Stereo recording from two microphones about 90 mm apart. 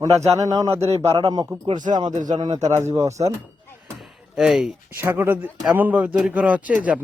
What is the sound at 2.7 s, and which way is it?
Speech, 35° right (ahead or behind).